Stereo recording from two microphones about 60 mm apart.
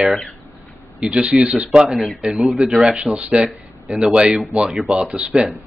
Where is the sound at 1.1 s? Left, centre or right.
Right.